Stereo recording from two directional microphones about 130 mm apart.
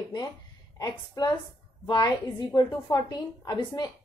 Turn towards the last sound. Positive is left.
turn(degrees=35)  # may be behind; listen again after turning